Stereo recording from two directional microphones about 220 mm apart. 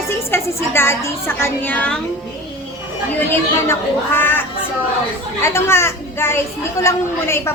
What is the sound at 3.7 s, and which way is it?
A woman's voice, 10° left (ahead or behind).